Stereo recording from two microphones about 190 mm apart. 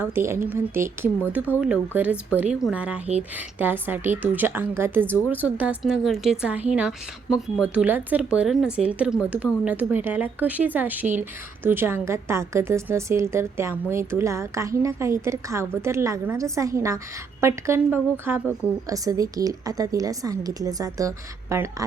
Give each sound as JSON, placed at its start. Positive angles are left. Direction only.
{"t": 0.0, "sound": "a woman's voice", "side_deg": -15}